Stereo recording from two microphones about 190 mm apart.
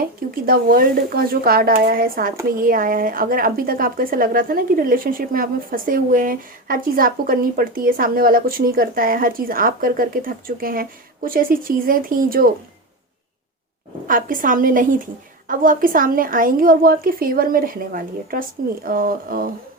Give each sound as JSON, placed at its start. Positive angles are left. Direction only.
{"t": 0.2, "sound": "speech", "side_deg": -50}
{"t": 14.1, "sound": "speech", "side_deg": -45}